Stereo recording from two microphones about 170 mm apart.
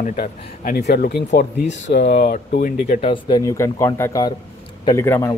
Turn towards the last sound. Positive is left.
turn(degrees=15)  # may be behind; listen again after turning